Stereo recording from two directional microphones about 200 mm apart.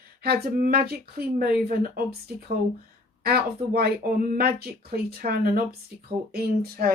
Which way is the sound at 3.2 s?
50° right (ahead or behind).